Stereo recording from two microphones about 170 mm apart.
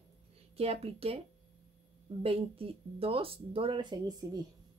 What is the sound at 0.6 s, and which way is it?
Speech, 35° right (ahead or behind).